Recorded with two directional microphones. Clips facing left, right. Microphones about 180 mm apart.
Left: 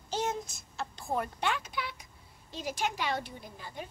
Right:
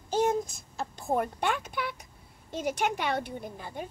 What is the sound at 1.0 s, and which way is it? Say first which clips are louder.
Speech: right 5 dB; 50° right (ahead or behind).